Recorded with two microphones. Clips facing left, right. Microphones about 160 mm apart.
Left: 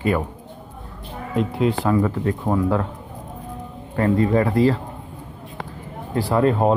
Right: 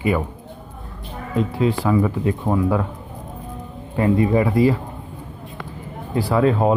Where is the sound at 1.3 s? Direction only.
Centre (ahead or behind); by 2.4 s 15° right (ahead or behind).